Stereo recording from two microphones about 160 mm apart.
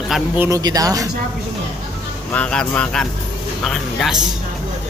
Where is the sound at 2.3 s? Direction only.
5° left (ahead or behind).